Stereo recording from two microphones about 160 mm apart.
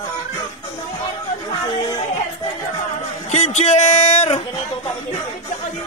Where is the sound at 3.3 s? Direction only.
45° left (ahead or behind).